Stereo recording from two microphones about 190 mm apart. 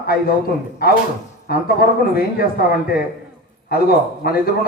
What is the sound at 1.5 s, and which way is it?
A man's voice, 55° left (ahead or behind).